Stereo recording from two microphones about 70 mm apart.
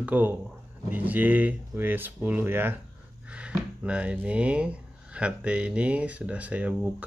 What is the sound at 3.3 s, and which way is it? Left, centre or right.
Speech, centre.